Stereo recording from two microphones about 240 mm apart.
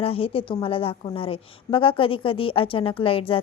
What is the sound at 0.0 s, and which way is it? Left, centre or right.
A woman's voice, left.